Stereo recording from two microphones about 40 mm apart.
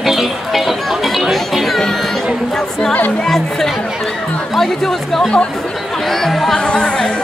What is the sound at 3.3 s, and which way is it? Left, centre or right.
Music, centre.